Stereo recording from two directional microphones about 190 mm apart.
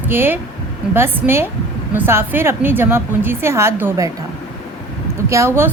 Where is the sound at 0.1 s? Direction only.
10° right (ahead or behind).